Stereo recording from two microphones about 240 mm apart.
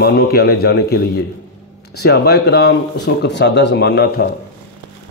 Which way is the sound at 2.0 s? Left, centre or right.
Left.